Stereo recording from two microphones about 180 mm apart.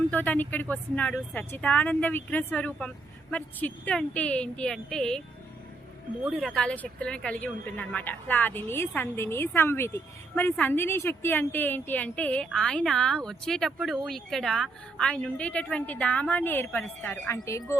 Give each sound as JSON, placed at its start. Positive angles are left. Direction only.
{"t": 0.1, "sound": "speech", "side_deg": 10}
{"t": 6.3, "sound": "speech", "side_deg": 5}